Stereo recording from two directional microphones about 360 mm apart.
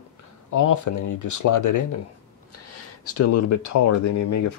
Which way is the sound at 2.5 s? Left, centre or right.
Left.